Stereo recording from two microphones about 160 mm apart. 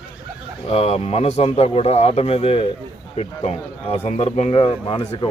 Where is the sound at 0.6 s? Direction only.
40° left (ahead or behind).